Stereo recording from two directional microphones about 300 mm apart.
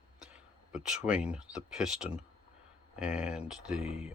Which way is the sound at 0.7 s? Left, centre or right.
Centre.